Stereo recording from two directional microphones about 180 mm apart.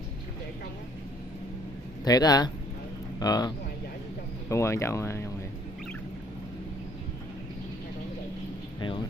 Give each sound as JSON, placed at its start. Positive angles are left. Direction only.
{"t": 2.0, "sound": "a man's voice", "side_deg": 20}